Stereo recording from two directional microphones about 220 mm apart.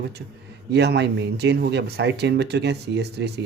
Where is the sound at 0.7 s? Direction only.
50° right (ahead or behind).